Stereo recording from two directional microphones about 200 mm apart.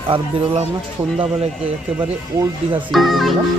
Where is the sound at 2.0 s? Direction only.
15° right (ahead or behind).